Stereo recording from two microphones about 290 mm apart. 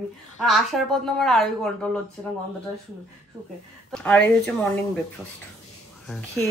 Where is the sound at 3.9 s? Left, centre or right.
Centre.